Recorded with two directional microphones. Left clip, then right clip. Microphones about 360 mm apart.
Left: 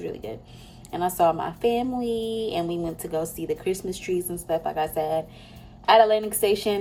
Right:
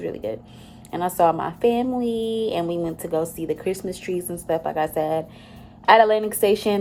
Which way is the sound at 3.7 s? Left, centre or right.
Right.